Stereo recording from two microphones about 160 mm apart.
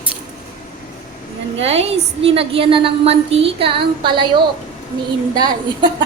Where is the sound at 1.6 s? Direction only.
40° right (ahead or behind).